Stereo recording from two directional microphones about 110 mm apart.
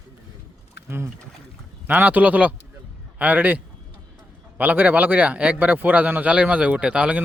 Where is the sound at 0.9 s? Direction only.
20° right (ahead or behind).